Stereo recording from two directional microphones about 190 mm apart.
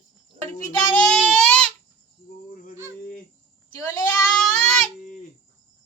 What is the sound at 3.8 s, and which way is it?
Speech, 20° left (ahead or behind).